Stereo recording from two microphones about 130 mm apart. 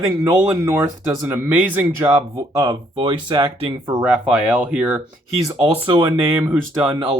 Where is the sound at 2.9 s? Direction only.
40° right (ahead or behind).